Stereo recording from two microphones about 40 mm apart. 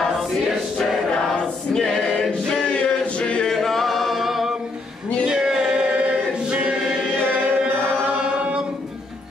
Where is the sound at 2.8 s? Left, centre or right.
Left.